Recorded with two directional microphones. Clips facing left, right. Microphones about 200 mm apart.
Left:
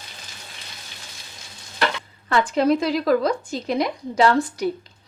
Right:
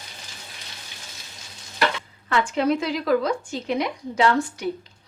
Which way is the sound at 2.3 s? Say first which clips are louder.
Left 3 dB; 35° left (ahead or behind).